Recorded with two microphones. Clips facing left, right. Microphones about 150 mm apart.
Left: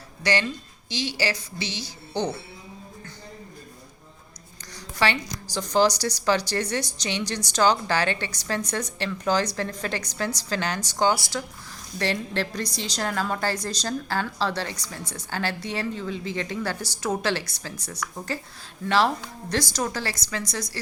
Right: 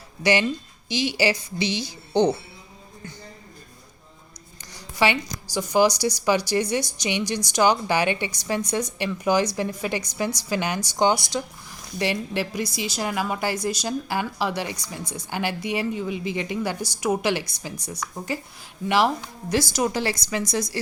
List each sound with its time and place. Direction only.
0.2 s a woman's voice: 15° right (ahead or behind)
5.0 s a woman's voice: 15° right (ahead or behind)